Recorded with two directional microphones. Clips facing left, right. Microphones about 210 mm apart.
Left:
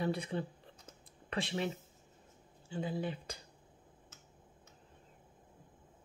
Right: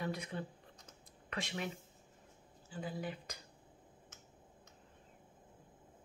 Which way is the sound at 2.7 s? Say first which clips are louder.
Left 5 dB; 25° left (ahead or behind).